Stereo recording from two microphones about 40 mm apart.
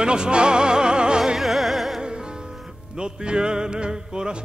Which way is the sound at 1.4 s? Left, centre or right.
Centre.